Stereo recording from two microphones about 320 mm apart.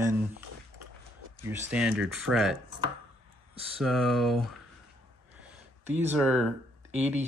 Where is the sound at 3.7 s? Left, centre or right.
Centre.